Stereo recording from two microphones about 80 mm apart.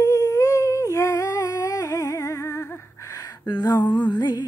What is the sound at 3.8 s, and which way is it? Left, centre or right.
Music, left.